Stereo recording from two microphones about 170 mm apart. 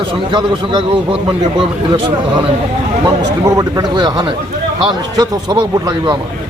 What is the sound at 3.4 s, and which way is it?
Speech, 20° right (ahead or behind).